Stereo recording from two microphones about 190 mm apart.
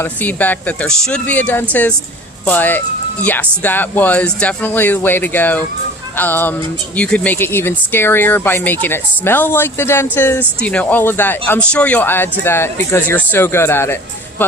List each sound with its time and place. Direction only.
0.0 s speech: 10° left (ahead or behind)